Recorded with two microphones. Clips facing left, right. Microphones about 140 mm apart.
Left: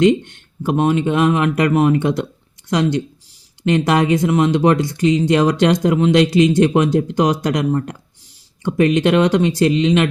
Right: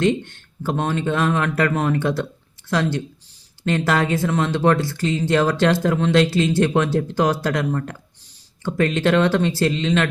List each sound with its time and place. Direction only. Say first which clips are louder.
0.0 s speech: left 6 dB; 15° left (ahead or behind)